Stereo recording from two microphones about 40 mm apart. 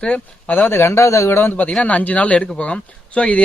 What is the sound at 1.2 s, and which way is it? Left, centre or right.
Speech, left.